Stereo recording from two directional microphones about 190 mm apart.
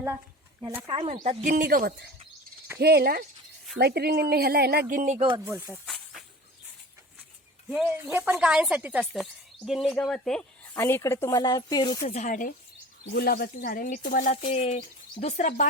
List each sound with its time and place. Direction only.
0.6 s speech: 15° right (ahead or behind)
0.9 s speech: 25° right (ahead or behind)
1.2 s speech: 35° right (ahead or behind)
5.2 s speech: 20° right (ahead or behind)
5.8 s snake: centre (ahead or behind)
7.7 s speech: 5° right (ahead or behind)
10.8 s speech: 15° left (ahead or behind)
12.0 s speech: 35° left (ahead or behind)
13.1 s speech: 55° left (ahead or behind); by 15.6 s 35° left (ahead or behind)